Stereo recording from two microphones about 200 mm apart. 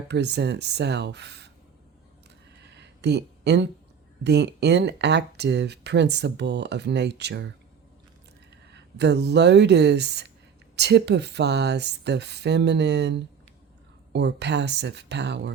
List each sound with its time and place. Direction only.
0.1 s speech: 55° right (ahead or behind)
2.6 s a sound: 60° right (ahead or behind)
4.2 s speech: 60° right (ahead or behind)
8.7 s speech: 55° right (ahead or behind)